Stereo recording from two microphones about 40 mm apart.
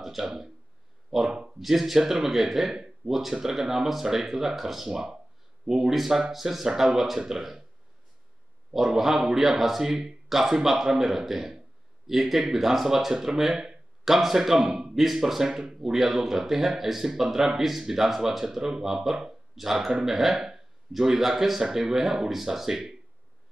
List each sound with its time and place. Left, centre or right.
0.0 s speech: centre
1.3 s a sound: right
1.6 s speech: centre
8.7 s speech: centre